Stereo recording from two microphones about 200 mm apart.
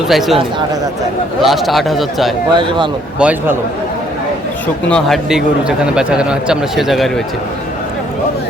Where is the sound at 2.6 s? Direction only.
25° right (ahead or behind).